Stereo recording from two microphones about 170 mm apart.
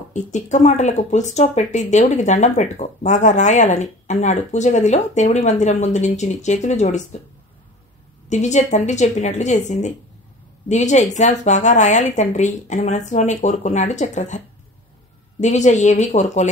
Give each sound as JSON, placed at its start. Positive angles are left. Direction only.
{"t": 0.1, "sound": "speech", "side_deg": 45}
{"t": 8.3, "sound": "speech", "side_deg": 45}
{"t": 15.4, "sound": "speech", "side_deg": 45}